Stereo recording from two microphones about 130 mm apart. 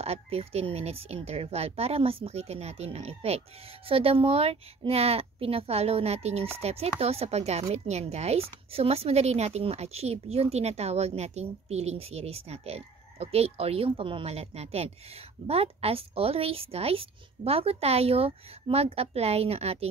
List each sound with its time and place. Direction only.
0.0 s a woman's voice: 50° right (ahead or behind)